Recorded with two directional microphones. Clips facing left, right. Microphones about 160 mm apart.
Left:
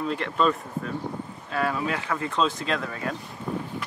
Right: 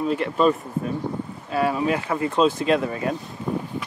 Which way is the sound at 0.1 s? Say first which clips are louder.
Right 4 dB; 10° right (ahead or behind).